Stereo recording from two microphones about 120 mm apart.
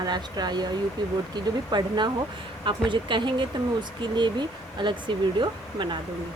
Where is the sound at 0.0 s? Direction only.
35° right (ahead or behind).